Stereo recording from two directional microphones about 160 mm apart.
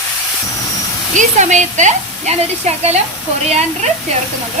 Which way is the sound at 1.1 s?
45° right (ahead or behind).